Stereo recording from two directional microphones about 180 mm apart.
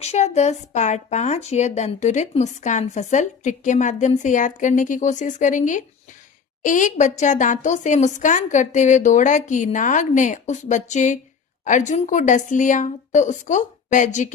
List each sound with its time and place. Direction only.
0.0 s a woman's voice: 40° left (ahead or behind)